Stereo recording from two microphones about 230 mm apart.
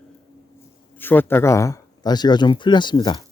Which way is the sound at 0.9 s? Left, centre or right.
Centre.